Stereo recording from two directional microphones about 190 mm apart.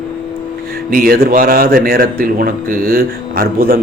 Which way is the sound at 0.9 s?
50° right (ahead or behind).